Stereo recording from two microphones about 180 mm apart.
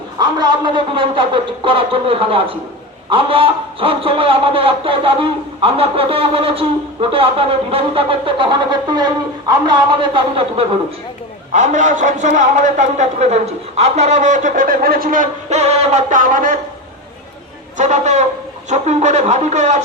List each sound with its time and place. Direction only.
0.2 s a man's voice: 25° right (ahead or behind)
11.5 s a man's voice: 40° right (ahead or behind)
17.7 s speech: 40° right (ahead or behind)